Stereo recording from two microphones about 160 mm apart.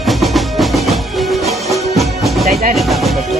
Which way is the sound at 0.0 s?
Centre (ahead or behind).